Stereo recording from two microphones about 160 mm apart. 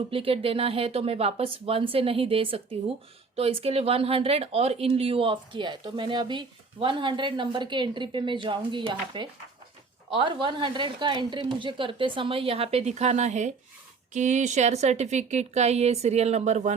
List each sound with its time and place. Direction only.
0.1 s speech: 35° right (ahead or behind)